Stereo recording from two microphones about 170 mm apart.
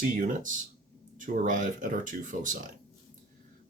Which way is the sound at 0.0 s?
50° right (ahead or behind).